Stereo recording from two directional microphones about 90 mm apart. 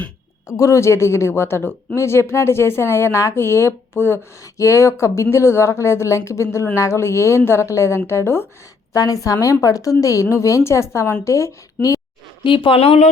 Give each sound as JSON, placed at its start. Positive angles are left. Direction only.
{"t": 0.4, "sound": "speech", "side_deg": 35}
{"t": 8.9, "sound": "speech", "side_deg": 40}
{"t": 12.4, "sound": "speech", "side_deg": 70}